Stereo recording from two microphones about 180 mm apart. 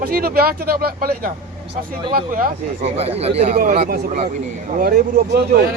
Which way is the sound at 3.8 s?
50° right (ahead or behind).